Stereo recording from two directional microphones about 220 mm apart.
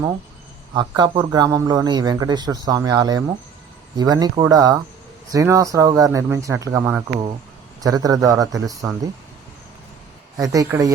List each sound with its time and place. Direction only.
0.7 s a man's voice: 20° right (ahead or behind)
10.3 s a man's voice: 15° right (ahead or behind)